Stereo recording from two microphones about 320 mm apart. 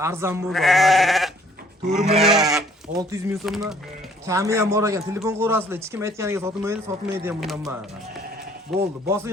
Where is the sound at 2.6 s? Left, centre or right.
Centre.